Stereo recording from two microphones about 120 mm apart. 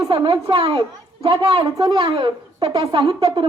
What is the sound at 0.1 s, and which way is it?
A woman's voice, 45° right (ahead or behind).